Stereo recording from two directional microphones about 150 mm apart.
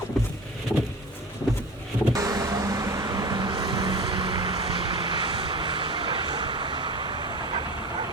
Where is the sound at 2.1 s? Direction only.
25° right (ahead or behind).